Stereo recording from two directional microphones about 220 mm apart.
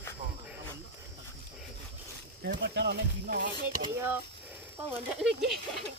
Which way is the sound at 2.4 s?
45° right (ahead or behind).